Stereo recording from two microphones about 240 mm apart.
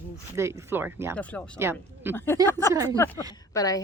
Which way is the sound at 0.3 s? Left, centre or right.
Centre.